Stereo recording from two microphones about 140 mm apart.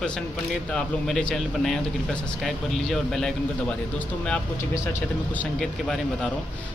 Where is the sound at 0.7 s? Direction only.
5° left (ahead or behind).